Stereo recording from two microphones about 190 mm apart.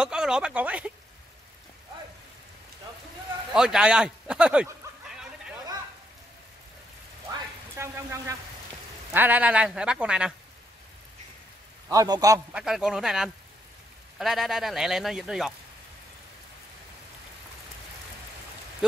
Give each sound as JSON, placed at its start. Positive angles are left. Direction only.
{"t": 0.0, "sound": "speech", "side_deg": -5}
{"t": 3.5, "sound": "speech", "side_deg": -5}
{"t": 7.7, "sound": "speech", "side_deg": -15}
{"t": 11.9, "sound": "speech", "side_deg": -20}
{"t": 12.5, "sound": "speech", "side_deg": -5}